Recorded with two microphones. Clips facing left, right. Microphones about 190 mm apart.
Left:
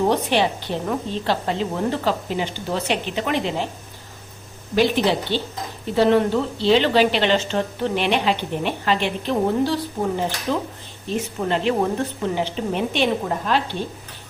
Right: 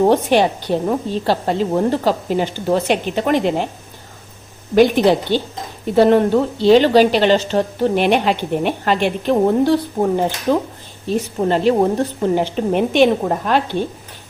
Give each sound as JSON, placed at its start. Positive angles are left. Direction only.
{"t": 0.0, "sound": "a woman's voice", "side_deg": -50}
{"t": 4.7, "sound": "a woman's voice", "side_deg": -50}
{"t": 11.1, "sound": "a woman's voice", "side_deg": -40}